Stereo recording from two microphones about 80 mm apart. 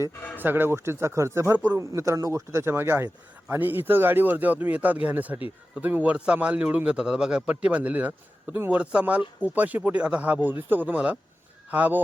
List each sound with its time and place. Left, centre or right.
0.3 s speech: right
1.5 s speech: centre
1.8 s a man's voice: right